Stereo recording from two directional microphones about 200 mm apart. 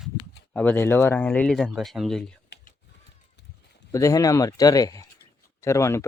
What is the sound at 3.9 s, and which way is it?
Speech, 15° left (ahead or behind).